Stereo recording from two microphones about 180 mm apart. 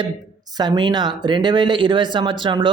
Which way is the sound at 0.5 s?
25° right (ahead or behind).